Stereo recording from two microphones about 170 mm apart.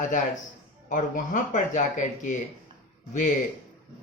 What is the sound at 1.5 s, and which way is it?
Speech, 45° left (ahead or behind).